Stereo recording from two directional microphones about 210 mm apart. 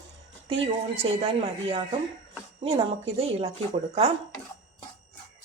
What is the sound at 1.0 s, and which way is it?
Speech, 25° right (ahead or behind).